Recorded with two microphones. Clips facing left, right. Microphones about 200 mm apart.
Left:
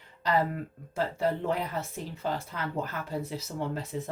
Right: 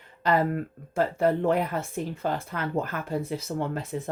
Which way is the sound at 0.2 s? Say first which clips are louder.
Right 4 dB; 55° right (ahead or behind).